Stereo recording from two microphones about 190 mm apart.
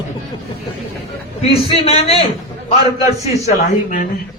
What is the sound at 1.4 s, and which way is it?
Speech, 30° left (ahead or behind).